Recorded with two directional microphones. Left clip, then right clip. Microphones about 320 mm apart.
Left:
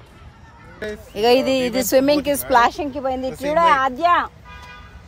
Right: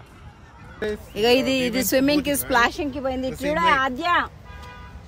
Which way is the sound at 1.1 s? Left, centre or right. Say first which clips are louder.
Left 4 dB; centre.